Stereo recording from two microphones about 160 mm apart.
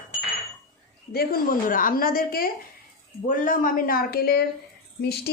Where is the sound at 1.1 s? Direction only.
70° left (ahead or behind).